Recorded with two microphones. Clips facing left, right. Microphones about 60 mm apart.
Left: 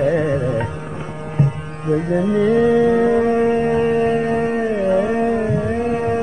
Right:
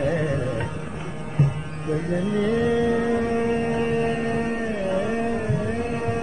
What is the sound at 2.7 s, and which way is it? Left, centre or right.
Music, left.